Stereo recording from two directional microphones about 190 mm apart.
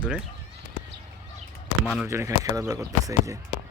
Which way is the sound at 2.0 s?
15° right (ahead or behind).